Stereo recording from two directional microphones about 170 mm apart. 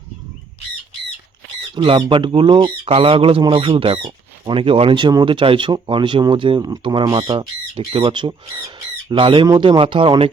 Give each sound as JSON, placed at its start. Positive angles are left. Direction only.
{"t": 1.7, "sound": "speech", "side_deg": -30}